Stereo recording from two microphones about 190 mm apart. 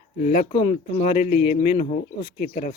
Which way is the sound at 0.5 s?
30° left (ahead or behind).